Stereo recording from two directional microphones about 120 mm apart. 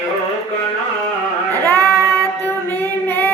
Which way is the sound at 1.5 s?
15° left (ahead or behind).